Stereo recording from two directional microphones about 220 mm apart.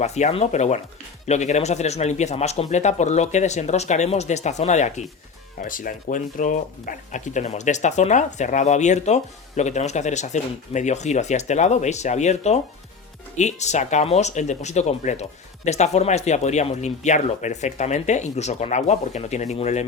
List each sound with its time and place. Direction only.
0.0 s speech: 30° left (ahead or behind)